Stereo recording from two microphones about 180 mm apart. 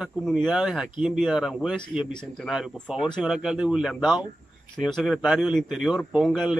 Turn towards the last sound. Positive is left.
turn(degrees=-5)  # may be behind; listen again after turning